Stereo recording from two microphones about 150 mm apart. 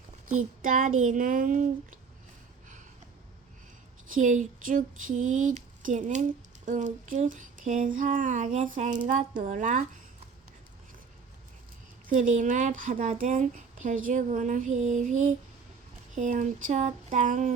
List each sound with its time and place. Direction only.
0.6 s speech: 60° right (ahead or behind)
4.1 s speech: 60° right (ahead or behind)
12.0 s speech: 60° right (ahead or behind)